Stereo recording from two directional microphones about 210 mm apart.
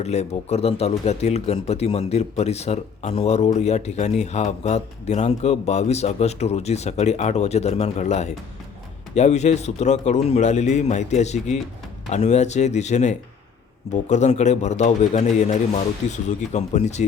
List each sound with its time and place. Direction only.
0.0 s speech: 30° left (ahead or behind)